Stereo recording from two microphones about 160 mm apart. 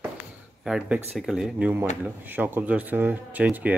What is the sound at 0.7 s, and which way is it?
A man's voice, 5° right (ahead or behind).